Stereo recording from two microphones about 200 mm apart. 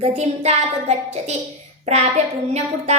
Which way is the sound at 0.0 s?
35° right (ahead or behind).